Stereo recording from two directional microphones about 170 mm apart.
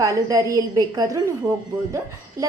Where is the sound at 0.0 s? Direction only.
20° right (ahead or behind).